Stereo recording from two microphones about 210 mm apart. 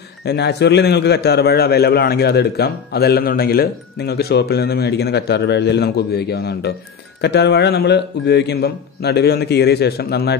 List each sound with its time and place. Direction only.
0.2 s a man's voice: 50° left (ahead or behind)